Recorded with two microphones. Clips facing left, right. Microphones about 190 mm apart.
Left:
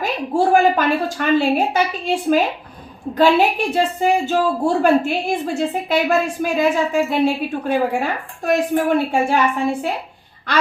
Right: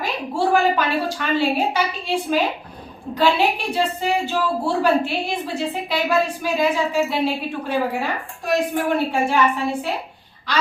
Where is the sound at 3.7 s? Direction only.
45° left (ahead or behind).